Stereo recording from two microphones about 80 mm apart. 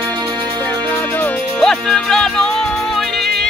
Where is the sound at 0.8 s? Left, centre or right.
Left.